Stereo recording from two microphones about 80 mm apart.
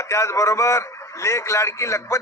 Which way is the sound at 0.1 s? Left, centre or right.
Left.